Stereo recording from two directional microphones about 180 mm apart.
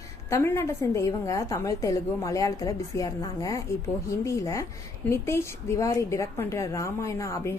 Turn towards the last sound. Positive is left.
turn(degrees=15)  # may be behind; listen again after turning